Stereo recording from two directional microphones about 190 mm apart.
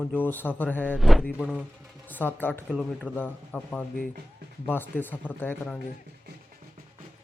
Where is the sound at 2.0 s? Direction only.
10° left (ahead or behind).